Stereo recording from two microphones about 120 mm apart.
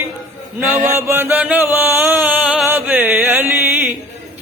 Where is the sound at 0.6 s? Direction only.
15° right (ahead or behind).